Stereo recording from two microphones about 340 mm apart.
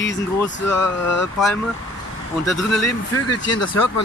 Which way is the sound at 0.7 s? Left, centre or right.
Left.